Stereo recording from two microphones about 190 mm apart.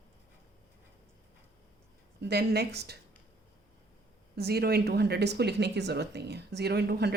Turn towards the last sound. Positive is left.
turn(degrees=-60)  # may be behind; listen again after turning